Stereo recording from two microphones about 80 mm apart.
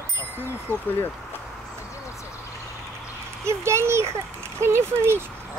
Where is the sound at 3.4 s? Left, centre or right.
Right.